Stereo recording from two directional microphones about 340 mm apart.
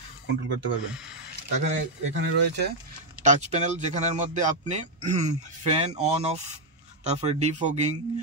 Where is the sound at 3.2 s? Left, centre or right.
Centre.